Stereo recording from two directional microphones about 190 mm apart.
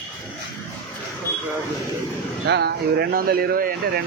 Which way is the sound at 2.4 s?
60° right (ahead or behind).